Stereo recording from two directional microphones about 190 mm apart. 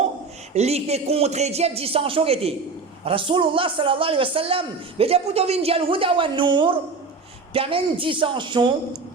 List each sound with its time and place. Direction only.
0.5 s a man's voice: 35° right (ahead or behind)